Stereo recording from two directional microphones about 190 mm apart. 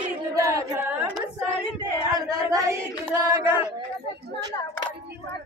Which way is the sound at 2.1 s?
20° right (ahead or behind).